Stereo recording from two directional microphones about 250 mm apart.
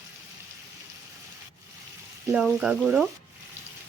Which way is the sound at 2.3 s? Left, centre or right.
Centre.